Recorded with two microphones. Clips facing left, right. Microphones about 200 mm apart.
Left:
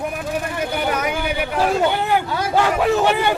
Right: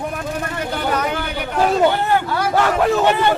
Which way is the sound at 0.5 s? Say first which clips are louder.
Right 2 dB; 10° left (ahead or behind).